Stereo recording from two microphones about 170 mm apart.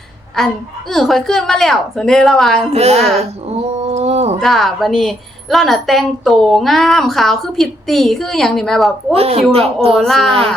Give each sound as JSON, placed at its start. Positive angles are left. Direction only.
{"t": 0.3, "sound": "a woman's voice", "side_deg": 0}
{"t": 2.7, "sound": "speech", "side_deg": -40}
{"t": 3.2, "sound": "a sound", "side_deg": -40}
{"t": 4.4, "sound": "a woman's voice", "side_deg": 0}
{"t": 9.1, "sound": "speech", "side_deg": -35}
{"t": 9.9, "sound": "a woman's voice", "side_deg": 0}